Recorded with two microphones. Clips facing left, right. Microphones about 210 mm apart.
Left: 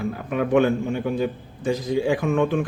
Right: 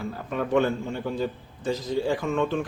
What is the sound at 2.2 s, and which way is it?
Speech, 55° left (ahead or behind).